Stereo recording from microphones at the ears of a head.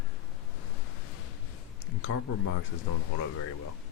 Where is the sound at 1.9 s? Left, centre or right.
Left.